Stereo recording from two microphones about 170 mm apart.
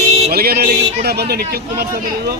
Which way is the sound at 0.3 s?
65° right (ahead or behind).